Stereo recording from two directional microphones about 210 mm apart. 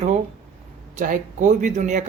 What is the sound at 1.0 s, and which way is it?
Speech, 35° right (ahead or behind).